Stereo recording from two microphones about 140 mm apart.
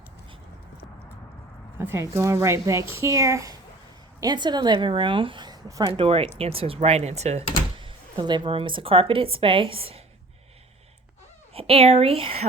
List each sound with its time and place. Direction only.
1.8 s a woman's voice: 15° right (ahead or behind)
5.8 s a woman's voice: 40° right (ahead or behind)
7.8 s a woman's voice: 35° right (ahead or behind)
11.5 s speech: 45° right (ahead or behind)